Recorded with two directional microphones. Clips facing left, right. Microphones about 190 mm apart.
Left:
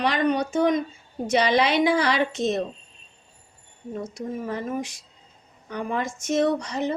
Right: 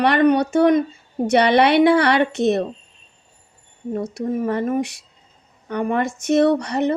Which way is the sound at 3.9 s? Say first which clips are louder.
Right 7 dB; 65° right (ahead or behind).